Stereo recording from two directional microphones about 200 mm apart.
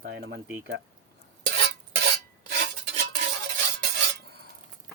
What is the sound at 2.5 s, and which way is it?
Stir, 45° right (ahead or behind).